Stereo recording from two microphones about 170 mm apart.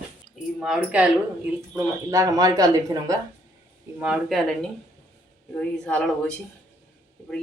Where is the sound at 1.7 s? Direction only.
20° right (ahead or behind).